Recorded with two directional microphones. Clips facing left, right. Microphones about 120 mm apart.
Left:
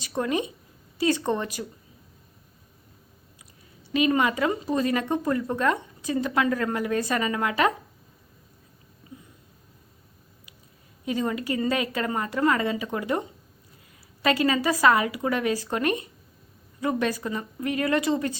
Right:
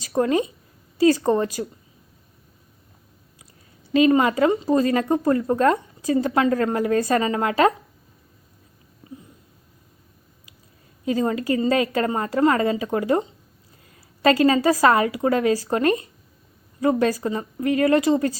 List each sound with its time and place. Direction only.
0.0 s a sound: 35° right (ahead or behind)
0.9 s a woman's voice: 40° right (ahead or behind)
3.9 s a woman's voice: 30° right (ahead or behind)
11.0 s a woman's voice: 35° right (ahead or behind)